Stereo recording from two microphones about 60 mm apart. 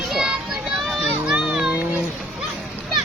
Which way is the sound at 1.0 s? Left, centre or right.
Centre.